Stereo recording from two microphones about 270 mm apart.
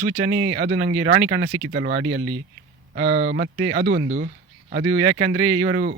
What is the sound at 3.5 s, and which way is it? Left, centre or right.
Speech, right.